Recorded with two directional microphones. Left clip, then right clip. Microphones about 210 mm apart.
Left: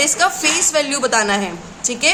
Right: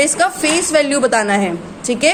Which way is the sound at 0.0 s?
15° right (ahead or behind).